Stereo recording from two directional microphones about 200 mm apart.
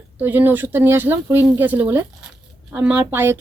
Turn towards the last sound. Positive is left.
turn(degrees=-10)  # may be behind; listen again after turning